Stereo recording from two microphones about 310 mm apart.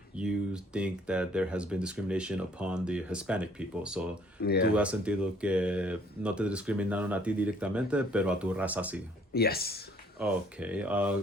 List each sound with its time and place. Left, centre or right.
0.2 s speech: centre
4.4 s speech: left
4.7 s speech: centre
9.3 s speech: left
10.2 s speech: centre